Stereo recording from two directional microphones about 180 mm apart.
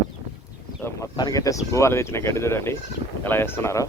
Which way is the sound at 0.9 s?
15° left (ahead or behind).